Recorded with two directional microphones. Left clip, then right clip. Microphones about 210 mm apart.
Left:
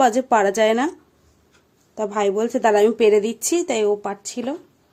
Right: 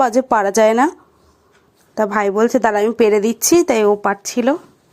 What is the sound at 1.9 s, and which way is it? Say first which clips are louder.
A woman's voice: right 5 dB; 25° right (ahead or behind).